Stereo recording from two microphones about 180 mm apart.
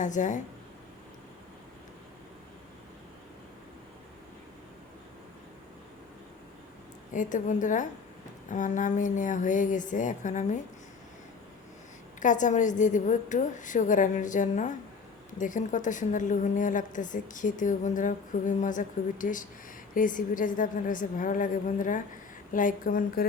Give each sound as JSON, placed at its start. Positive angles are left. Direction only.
{"t": 0.0, "sound": "a woman's voice", "side_deg": 45}
{"t": 7.1, "sound": "a woman's voice", "side_deg": 45}
{"t": 12.2, "sound": "a woman's voice", "side_deg": 45}